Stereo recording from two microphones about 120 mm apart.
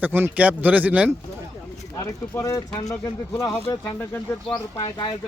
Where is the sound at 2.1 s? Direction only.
25° left (ahead or behind).